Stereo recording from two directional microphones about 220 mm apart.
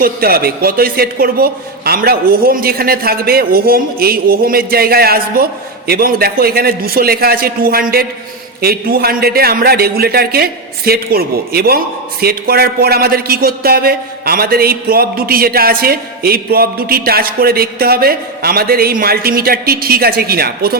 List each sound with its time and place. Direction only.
0.0 s a man's voice: 45° right (ahead or behind)